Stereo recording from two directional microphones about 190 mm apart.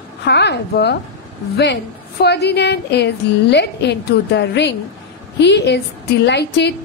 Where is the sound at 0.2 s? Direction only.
65° left (ahead or behind).